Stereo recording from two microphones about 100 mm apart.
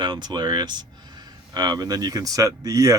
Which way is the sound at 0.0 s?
45° right (ahead or behind).